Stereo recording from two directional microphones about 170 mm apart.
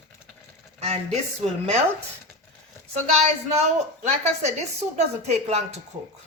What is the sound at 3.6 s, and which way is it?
A woman's voice, 40° right (ahead or behind).